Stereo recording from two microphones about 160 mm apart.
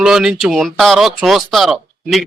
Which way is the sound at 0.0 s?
5° right (ahead or behind).